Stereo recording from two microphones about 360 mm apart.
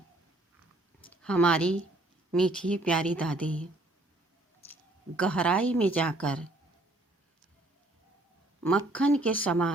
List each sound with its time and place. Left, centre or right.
1.0 s a woman's voice: centre
4.7 s speech: centre
8.9 s a woman's voice: centre